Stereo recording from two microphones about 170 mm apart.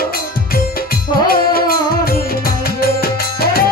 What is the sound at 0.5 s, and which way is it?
Music, 60° left (ahead or behind).